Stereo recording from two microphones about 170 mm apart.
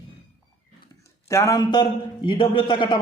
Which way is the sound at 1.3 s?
20° left (ahead or behind).